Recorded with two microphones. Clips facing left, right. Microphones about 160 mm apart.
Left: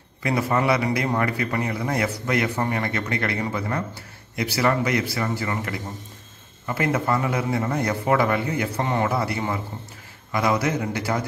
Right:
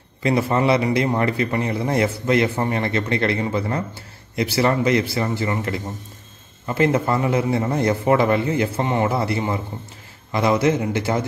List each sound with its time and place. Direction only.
0.2 s a man's voice: 25° right (ahead or behind)